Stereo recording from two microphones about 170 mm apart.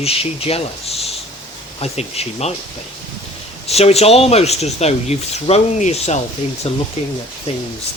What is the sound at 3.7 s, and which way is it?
Speech, 35° left (ahead or behind).